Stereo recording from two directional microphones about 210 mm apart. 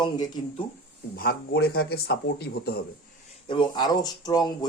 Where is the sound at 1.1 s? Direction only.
50° left (ahead or behind).